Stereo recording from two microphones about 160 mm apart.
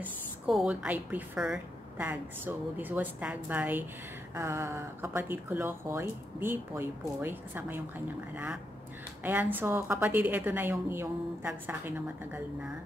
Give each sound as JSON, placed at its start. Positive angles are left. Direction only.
{"t": 0.0, "sound": "speech", "side_deg": -5}
{"t": 9.2, "sound": "speech", "side_deg": -10}